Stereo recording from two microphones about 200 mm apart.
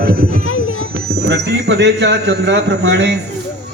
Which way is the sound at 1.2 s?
55° right (ahead or behind).